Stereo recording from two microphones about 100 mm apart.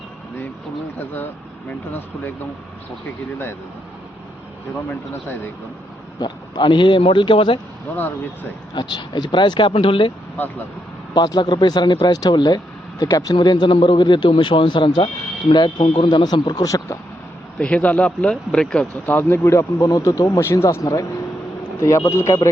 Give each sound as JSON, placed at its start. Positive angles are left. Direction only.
{"t": 0.9, "sound": "speech", "side_deg": 20}
{"t": 6.1, "sound": "speech", "side_deg": 50}
{"t": 8.7, "sound": "speech", "side_deg": 50}
{"t": 10.4, "sound": "speech", "side_deg": 20}
{"t": 11.1, "sound": "speech", "side_deg": 40}
{"t": 17.6, "sound": "speech", "side_deg": 10}
{"t": 19.0, "sound": "speech", "side_deg": 20}